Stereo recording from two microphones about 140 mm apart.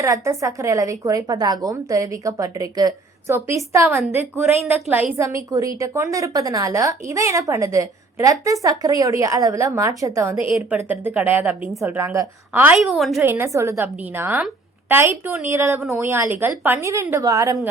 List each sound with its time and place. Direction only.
0.0 s a woman's voice: 20° right (ahead or behind)
10.8 s a woman's voice: 10° right (ahead or behind)
12.7 s a woman's voice: centre (ahead or behind)
13.2 s a woman's voice: 15° right (ahead or behind)